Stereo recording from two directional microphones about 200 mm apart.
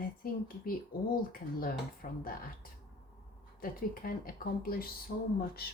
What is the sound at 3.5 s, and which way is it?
Speech, 45° left (ahead or behind).